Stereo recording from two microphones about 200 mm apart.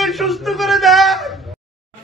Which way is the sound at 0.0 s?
Centre (ahead or behind).